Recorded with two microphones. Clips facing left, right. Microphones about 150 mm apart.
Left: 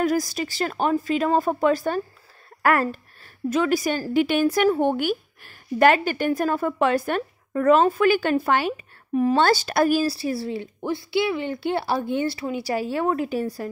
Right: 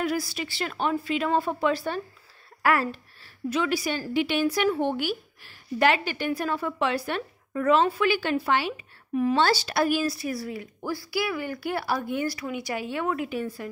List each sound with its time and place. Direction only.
0.0 s a woman's voice: 45° left (ahead or behind)